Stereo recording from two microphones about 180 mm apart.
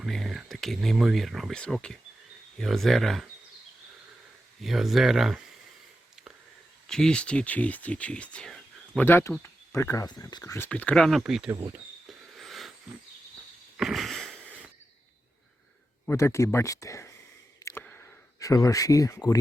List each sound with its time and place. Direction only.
0.0 s speech: centre (ahead or behind)
4.6 s speech: centre (ahead or behind)
6.8 s speech: 5° left (ahead or behind)
10.7 s speech: 5° left (ahead or behind)
11.7 s a sound: centre (ahead or behind)
13.7 s sniff: centre (ahead or behind)
16.0 s speech: 15° left (ahead or behind)
17.6 s a sound: 15° left (ahead or behind)
18.3 s speech: 20° left (ahead or behind)